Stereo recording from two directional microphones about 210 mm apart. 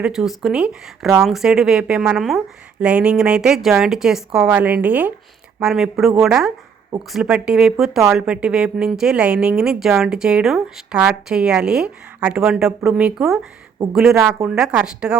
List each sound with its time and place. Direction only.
0.0 s speech: 5° right (ahead or behind)